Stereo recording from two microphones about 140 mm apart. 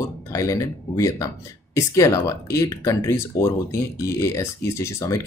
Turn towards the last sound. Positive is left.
turn(degrees=20)  # may be behind; listen again after turning